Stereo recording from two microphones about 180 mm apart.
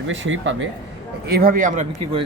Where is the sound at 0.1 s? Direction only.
90° right.